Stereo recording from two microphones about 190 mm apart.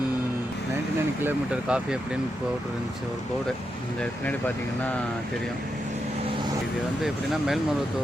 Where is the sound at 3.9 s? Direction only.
10° left (ahead or behind).